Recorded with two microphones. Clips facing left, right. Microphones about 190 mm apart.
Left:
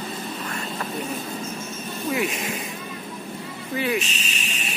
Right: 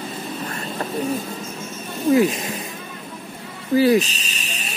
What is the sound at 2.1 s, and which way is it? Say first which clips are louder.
Speech: right 9 dB; 35° right (ahead or behind).